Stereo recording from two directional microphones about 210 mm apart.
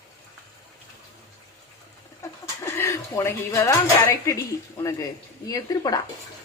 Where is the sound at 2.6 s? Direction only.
10° left (ahead or behind).